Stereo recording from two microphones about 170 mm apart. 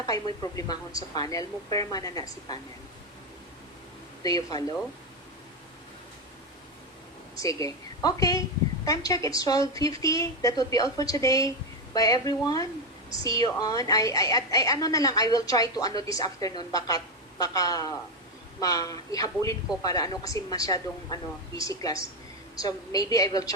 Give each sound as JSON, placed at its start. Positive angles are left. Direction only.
{"t": 0.5, "sound": "a woman's voice", "side_deg": 20}
{"t": 4.2, "sound": "a woman's voice", "side_deg": 20}
{"t": 7.4, "sound": "a woman's voice", "side_deg": 20}